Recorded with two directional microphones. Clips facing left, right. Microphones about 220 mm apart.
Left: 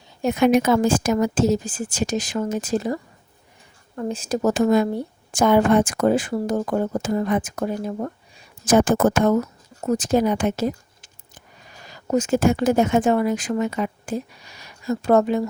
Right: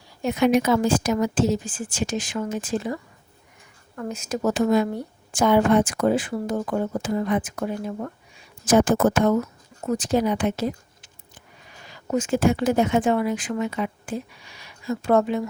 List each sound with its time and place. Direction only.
0.2 s speech: 50° left (ahead or behind)
8.6 s speech: 50° left (ahead or behind)